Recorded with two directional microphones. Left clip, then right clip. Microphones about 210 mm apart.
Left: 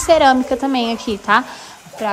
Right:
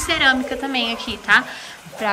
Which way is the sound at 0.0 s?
25° left (ahead or behind).